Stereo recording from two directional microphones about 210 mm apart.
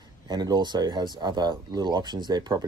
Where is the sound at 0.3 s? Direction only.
20° right (ahead or behind).